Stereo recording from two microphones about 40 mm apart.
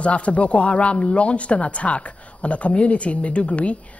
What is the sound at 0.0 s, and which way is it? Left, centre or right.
Speech, left.